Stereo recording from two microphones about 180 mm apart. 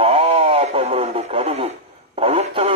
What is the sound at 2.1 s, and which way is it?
Radio, 35° right (ahead or behind).